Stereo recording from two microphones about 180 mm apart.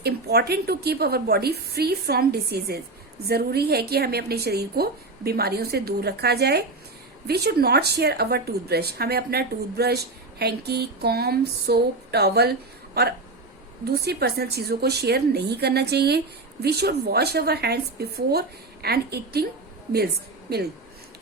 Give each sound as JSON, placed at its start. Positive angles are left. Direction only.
{"t": 0.0, "sound": "a woman's voice", "side_deg": -60}
{"t": 20.5, "sound": "a woman's voice", "side_deg": -60}